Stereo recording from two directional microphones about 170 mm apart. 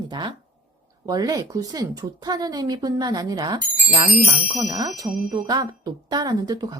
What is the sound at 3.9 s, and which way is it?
Speech, 35° right (ahead or behind).